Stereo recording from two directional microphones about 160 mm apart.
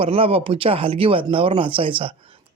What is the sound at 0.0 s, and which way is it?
Speech, 35° right (ahead or behind).